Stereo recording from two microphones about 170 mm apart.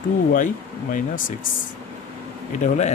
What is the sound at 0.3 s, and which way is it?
Speech, 50° left (ahead or behind).